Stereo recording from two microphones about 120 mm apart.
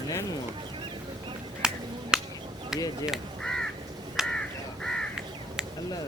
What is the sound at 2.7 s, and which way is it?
Speech, 30° left (ahead or behind).